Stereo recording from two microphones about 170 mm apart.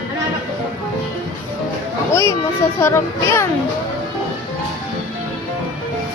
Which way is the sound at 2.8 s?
15° left (ahead or behind).